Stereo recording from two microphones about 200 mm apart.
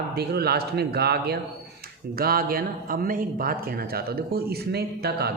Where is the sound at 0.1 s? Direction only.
55° right (ahead or behind).